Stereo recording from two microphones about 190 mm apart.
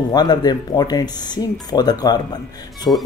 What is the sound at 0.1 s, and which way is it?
Speech, 20° left (ahead or behind).